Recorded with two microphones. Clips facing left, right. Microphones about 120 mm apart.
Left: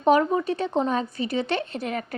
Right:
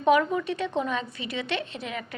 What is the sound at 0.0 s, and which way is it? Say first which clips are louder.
Speech: left 2 dB; 35° left (ahead or behind).